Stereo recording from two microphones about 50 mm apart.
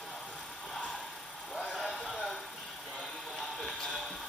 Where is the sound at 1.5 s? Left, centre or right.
Centre.